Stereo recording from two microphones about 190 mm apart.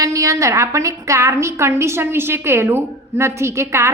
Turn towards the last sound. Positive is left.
turn(degrees=-15)  # may be behind; listen again after turning